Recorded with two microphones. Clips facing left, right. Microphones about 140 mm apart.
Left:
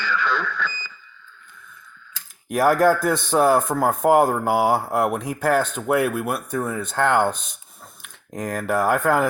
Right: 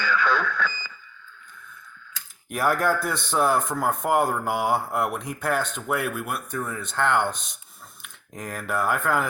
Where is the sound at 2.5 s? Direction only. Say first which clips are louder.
Left 6 dB; 40° left (ahead or behind).